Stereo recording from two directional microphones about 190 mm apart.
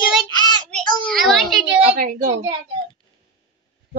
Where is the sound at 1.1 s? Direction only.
Centre (ahead or behind).